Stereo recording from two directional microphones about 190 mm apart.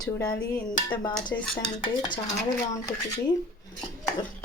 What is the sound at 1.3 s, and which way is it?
Speech, 15° left (ahead or behind).